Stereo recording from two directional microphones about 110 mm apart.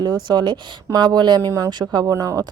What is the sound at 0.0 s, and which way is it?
Speech, 40° right (ahead or behind).